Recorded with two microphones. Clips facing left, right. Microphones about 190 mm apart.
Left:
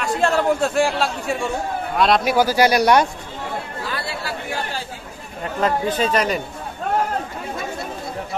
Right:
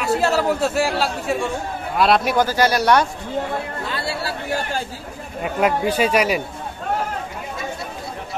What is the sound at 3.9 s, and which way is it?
Chatter, 25° right (ahead or behind).